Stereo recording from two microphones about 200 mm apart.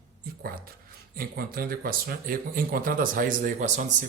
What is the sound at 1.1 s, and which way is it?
Speech, 50° right (ahead or behind).